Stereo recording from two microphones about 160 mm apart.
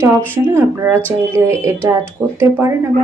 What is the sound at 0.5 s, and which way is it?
Speech, 15° right (ahead or behind).